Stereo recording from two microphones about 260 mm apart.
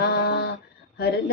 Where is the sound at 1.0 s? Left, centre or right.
Left.